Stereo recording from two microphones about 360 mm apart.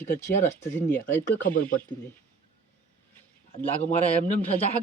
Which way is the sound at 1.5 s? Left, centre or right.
Left.